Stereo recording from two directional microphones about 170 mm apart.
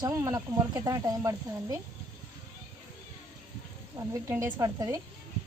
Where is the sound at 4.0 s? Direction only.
15° right (ahead or behind).